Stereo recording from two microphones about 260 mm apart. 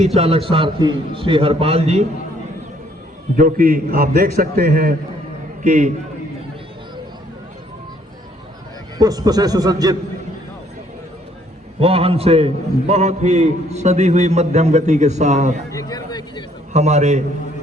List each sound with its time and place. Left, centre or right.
0.0 s a man's voice: right
3.3 s a man's voice: right
9.0 s a man's voice: centre
11.8 s a man's voice: right
15.7 s a sound: centre
16.7 s a man's voice: right